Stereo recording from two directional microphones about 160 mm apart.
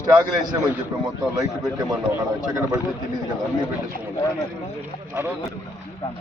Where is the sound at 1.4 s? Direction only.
20° right (ahead or behind).